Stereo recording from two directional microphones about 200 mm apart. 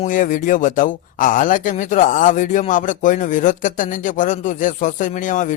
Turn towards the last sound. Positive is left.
turn(degrees=40)  # may be behind; listen again after turning